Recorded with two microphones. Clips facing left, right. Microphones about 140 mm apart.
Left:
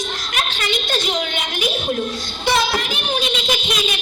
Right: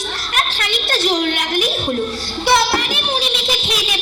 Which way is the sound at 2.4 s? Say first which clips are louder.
Right 3 dB; 70° right (ahead or behind).